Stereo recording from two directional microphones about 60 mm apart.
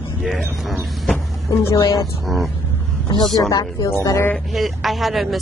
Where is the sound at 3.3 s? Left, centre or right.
Left.